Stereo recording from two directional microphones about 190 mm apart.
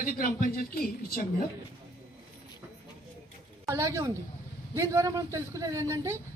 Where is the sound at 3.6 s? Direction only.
15° right (ahead or behind).